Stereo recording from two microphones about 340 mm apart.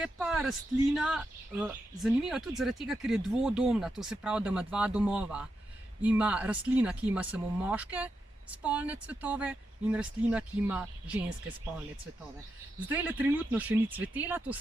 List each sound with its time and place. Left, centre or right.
0.0 s a sound: centre
0.9 s speech: centre
12.9 s speech: centre